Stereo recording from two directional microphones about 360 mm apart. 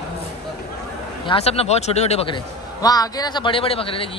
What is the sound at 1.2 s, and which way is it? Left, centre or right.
A man's voice, centre.